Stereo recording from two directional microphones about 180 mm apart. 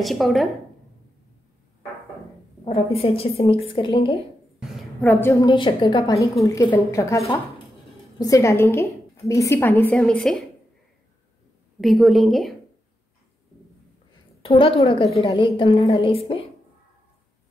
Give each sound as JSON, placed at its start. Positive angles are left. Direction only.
{"t": 0.0, "sound": "a woman's voice", "side_deg": 0}
{"t": 2.6, "sound": "a woman's voice", "side_deg": 30}
{"t": 5.0, "sound": "a woman's voice", "side_deg": 15}
{"t": 8.2, "sound": "a woman's voice", "side_deg": 15}
{"t": 11.8, "sound": "a woman's voice", "side_deg": 0}
{"t": 14.4, "sound": "a sound", "side_deg": 30}
{"t": 15.2, "sound": "a woman's voice", "side_deg": 30}